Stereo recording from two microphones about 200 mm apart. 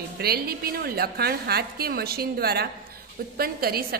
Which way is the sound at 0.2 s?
50° right (ahead or behind).